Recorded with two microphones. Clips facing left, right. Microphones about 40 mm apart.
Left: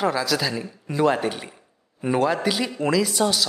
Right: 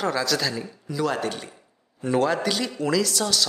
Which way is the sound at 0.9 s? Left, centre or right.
Left.